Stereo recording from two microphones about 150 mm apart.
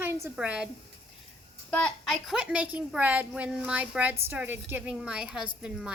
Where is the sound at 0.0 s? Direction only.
15° right (ahead or behind).